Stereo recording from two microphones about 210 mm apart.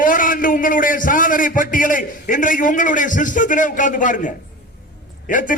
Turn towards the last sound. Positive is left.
turn(degrees=40)  # may be behind; listen again after turning